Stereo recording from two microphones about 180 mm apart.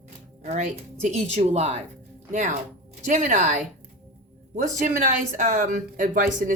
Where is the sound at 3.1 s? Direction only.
40° right (ahead or behind).